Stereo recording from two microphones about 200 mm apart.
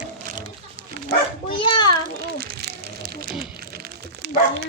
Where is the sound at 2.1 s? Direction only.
50° right (ahead or behind).